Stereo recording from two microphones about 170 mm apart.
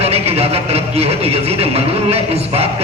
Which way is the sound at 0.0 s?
35° right (ahead or behind).